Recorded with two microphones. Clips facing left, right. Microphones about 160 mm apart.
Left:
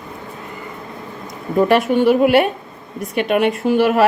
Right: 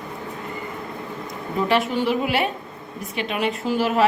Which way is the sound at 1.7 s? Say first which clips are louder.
Left 6 dB; 55° left (ahead or behind).